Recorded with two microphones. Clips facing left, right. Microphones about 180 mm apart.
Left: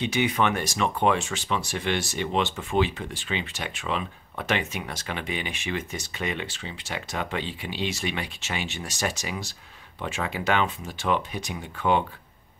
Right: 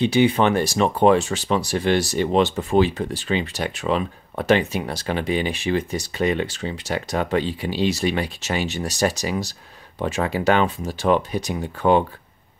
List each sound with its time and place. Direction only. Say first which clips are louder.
0.0 s speech: right 7 dB; 30° right (ahead or behind)